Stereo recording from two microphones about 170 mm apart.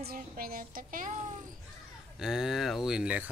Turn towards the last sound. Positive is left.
turn(degrees=-5)  # may be behind; listen again after turning